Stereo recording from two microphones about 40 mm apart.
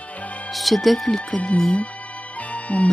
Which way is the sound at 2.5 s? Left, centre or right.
Left.